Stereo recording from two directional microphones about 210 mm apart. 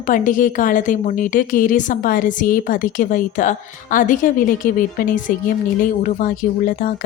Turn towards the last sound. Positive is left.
turn(degrees=40)  # may be behind; listen again after turning